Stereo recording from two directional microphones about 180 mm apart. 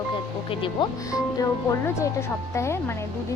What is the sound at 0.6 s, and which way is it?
Speech, 20° left (ahead or behind).